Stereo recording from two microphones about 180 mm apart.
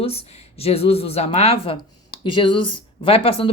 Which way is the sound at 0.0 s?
35° left (ahead or behind).